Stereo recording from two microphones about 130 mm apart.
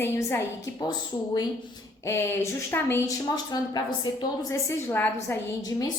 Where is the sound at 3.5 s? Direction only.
30° left (ahead or behind).